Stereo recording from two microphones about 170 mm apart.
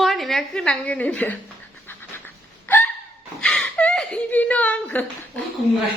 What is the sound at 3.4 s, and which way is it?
Whimper, 5° left (ahead or behind).